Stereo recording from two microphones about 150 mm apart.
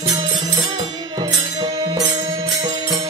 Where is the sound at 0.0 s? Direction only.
25° right (ahead or behind).